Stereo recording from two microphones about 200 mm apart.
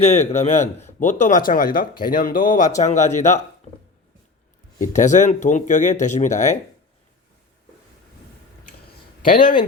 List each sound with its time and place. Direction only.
0.0 s speech: 30° left (ahead or behind)
4.8 s speech: 40° left (ahead or behind)
9.2 s speech: 40° left (ahead or behind)